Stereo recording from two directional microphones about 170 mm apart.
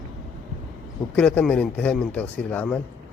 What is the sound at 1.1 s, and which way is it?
Speech, 5° left (ahead or behind).